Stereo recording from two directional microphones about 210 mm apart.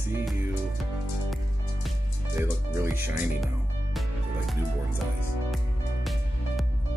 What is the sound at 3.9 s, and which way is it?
Music, centre (ahead or behind).